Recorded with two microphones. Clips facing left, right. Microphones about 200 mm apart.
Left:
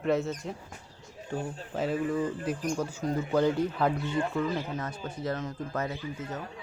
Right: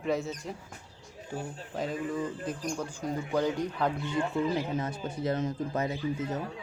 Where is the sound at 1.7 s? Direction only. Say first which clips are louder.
Left 4 dB; 5° left (ahead or behind).